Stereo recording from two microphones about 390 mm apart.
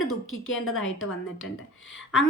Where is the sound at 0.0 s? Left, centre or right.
Left.